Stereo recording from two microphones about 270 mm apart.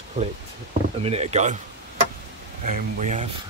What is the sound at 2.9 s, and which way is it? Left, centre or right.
Speech, right.